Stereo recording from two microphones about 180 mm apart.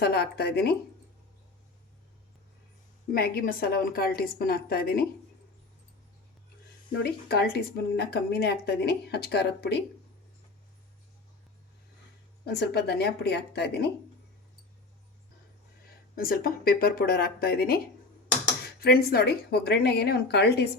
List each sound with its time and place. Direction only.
0.0 s speech: 60° left (ahead or behind)
3.1 s speech: 55° left (ahead or behind)
6.9 s speech: 65° left (ahead or behind)
12.5 s speech: 65° left (ahead or behind)
16.1 s speech: 55° left (ahead or behind)
18.8 s speech: 60° left (ahead or behind)